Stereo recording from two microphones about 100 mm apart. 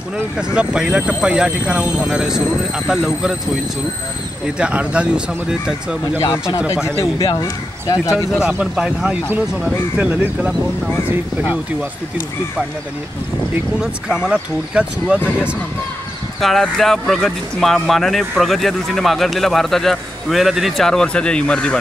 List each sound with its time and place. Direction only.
0.6 s speech: 10° right (ahead or behind)
4.6 s speech: 10° right (ahead or behind)
7.2 s speech: 40° left (ahead or behind)
8.5 s speech: 10° right (ahead or behind)
13.7 s speech: 5° right (ahead or behind)
16.3 s speech: centre (ahead or behind)